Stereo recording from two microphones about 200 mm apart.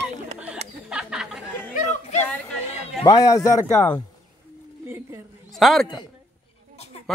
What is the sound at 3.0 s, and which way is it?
Speech, 15° left (ahead or behind).